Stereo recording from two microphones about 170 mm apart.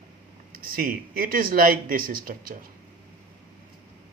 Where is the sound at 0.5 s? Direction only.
55° right (ahead or behind).